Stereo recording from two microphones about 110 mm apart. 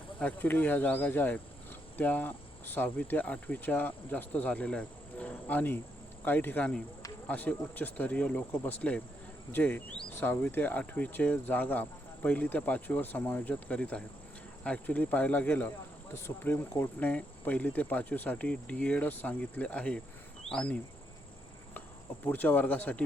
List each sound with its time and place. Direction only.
0.2 s speech: 15° left (ahead or behind)
21.8 s insect: 15° left (ahead or behind)